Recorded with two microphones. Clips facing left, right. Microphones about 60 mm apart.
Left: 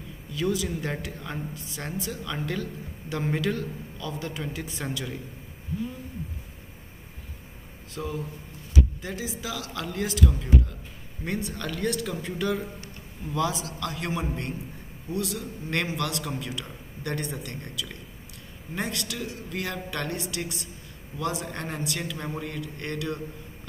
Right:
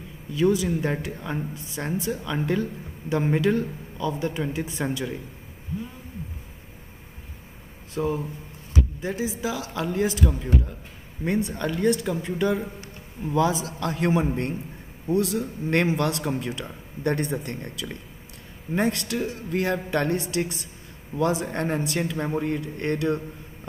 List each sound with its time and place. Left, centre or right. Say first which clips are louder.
0.3 s speech: right 6 dB; right
7.9 s a man's voice: right 7 dB; right